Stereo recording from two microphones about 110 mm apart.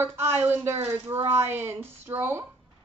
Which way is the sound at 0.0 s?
20° right (ahead or behind).